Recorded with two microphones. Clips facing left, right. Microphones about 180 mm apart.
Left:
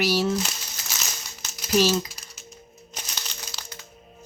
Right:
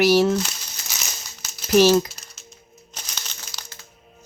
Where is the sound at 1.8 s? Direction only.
60° right (ahead or behind).